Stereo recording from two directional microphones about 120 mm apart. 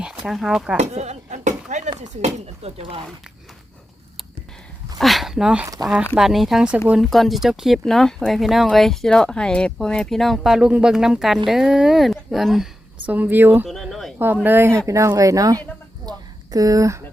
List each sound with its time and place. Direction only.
0.0 s speech: 5° right (ahead or behind)
0.8 s a sound: 70° right (ahead or behind)
2.0 s speech: 65° right (ahead or behind)
4.9 s dog: centre (ahead or behind)
5.6 s speech: 30° right (ahead or behind)
6.1 s speech: centre (ahead or behind)
13.1 s speech: 15° right (ahead or behind)
13.7 s speech: centre (ahead or behind)
14.3 s speech: 15° right (ahead or behind)
16.0 s a sound: 30° right (ahead or behind)